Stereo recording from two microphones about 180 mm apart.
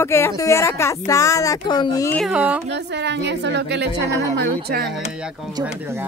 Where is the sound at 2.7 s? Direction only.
70° right (ahead or behind).